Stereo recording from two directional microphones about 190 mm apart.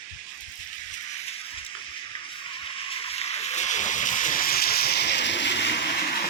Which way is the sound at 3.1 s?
35° left (ahead or behind).